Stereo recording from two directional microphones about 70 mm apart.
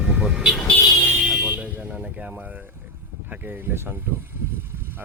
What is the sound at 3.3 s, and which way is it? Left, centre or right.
Speech, right.